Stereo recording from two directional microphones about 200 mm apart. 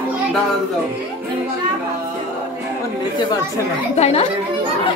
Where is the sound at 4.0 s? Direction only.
30° left (ahead or behind).